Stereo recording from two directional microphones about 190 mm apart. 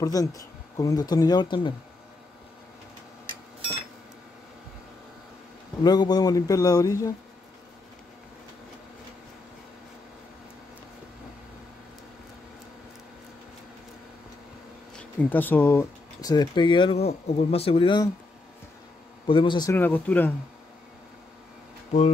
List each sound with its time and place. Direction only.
0.0 s speech: 20° left (ahead or behind)
5.9 s speech: 20° left (ahead or behind)
15.0 s speech: 10° left (ahead or behind)
19.2 s speech: 25° left (ahead or behind)
19.7 s speech: 10° left (ahead or behind)